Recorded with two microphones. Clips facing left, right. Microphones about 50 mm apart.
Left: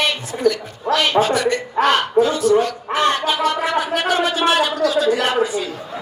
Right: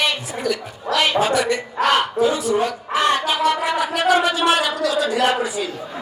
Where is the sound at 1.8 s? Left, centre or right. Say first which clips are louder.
Left 3 dB; left.